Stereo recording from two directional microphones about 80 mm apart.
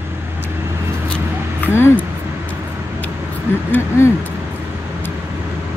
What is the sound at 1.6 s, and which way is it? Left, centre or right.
Speech, left.